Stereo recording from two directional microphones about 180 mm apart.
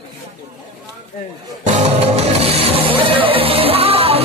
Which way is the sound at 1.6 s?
35° right (ahead or behind).